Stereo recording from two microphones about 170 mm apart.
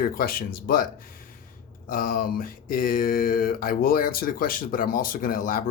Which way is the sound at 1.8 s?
55° left (ahead or behind).